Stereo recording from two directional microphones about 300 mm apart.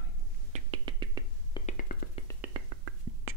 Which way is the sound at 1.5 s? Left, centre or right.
Left.